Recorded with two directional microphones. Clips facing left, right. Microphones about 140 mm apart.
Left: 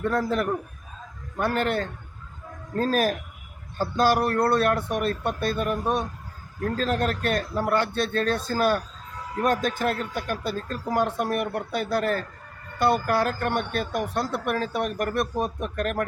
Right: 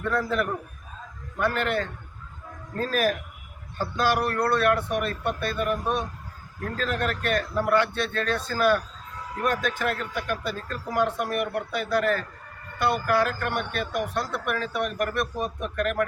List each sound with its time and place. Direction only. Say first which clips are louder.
0.1 s speech: right 3 dB; 35° left (ahead or behind)